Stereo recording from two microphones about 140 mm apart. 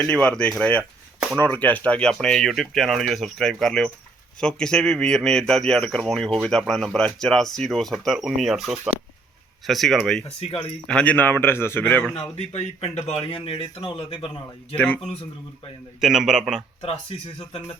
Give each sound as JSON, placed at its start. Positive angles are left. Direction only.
{"t": 0.0, "sound": "a man's voice", "side_deg": 10}
{"t": 10.4, "sound": "speech", "side_deg": 45}
{"t": 10.8, "sound": "a man's voice", "side_deg": 10}
{"t": 12.4, "sound": "speech", "side_deg": 50}
{"t": 14.8, "sound": "a man's voice", "side_deg": 10}
{"t": 16.0, "sound": "speech", "side_deg": -5}
{"t": 16.8, "sound": "speech", "side_deg": 45}